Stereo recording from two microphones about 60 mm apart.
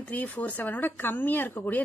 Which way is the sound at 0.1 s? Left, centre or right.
Left.